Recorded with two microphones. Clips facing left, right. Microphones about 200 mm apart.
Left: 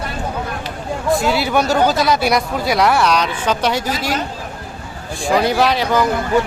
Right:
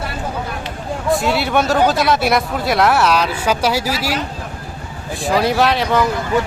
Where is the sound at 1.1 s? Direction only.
Centre (ahead or behind).